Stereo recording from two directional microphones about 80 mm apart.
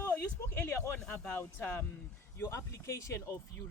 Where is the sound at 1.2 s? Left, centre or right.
Centre; by 3.6 s left.